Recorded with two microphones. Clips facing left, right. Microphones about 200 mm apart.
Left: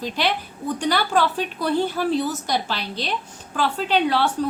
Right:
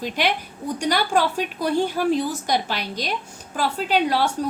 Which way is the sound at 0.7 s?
10° right (ahead or behind).